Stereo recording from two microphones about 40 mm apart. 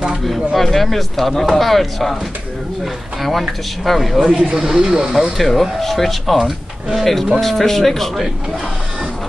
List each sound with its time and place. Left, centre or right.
0.6 s speech: centre
4.4 s speech: centre
5.4 s speech: centre
7.3 s speech: centre